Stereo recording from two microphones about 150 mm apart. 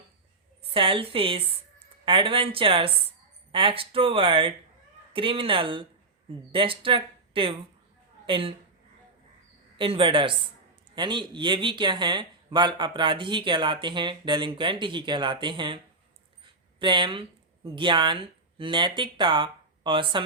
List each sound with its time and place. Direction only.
0.7 s speech: 35° right (ahead or behind)
9.7 s speech: 35° right (ahead or behind)